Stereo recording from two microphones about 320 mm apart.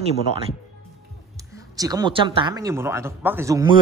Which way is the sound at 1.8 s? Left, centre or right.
Centre.